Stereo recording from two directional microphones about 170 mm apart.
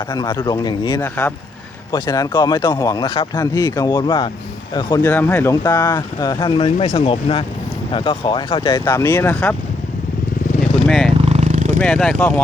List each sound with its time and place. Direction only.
0.1 s speech: 25° left (ahead or behind)
5.1 s speech: 15° left (ahead or behind)
5.9 s speech: 25° left (ahead or behind)
9.3 s speech: 5° left (ahead or behind)
10.8 s a sound: centre (ahead or behind)
11.2 s a sound: 40° right (ahead or behind)
11.8 s speech: 5° left (ahead or behind)